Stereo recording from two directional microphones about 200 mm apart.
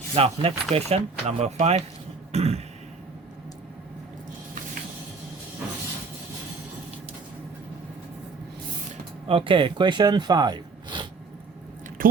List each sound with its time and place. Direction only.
0.1 s speech: 30° right (ahead or behind)
2.3 s a sound: 30° right (ahead or behind)
9.2 s speech: 25° right (ahead or behind)